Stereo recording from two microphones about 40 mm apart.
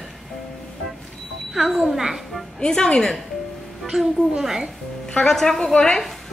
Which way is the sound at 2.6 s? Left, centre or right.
Left.